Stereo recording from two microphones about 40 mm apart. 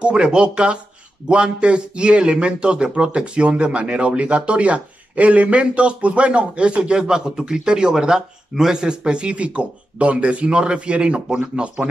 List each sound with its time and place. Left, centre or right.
0.0 s speech: right